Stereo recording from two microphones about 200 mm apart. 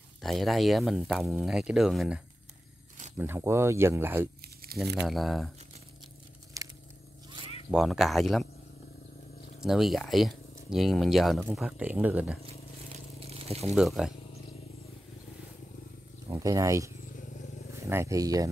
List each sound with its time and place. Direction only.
0.2 s speech: centre (ahead or behind)
5.0 s speech: centre (ahead or behind)
6.5 s a sound: 15° right (ahead or behind)
7.7 s speech: centre (ahead or behind)
9.6 s speech: centre (ahead or behind)
13.2 s a sound: 30° right (ahead or behind)
13.7 s speech: 5° right (ahead or behind)
16.3 s speech: 15° right (ahead or behind)